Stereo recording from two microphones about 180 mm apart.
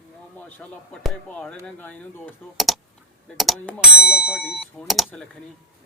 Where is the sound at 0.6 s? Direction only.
10° left (ahead or behind).